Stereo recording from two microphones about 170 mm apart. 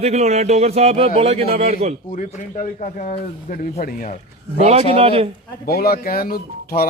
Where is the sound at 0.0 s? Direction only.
40° right (ahead or behind).